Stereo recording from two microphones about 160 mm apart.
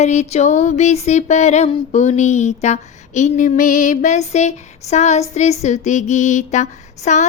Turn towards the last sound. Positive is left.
turn(degrees=50)  # may be behind; listen again after turning